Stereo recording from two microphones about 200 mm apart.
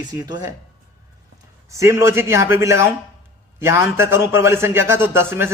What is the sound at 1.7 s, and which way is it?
A man's voice, 15° right (ahead or behind).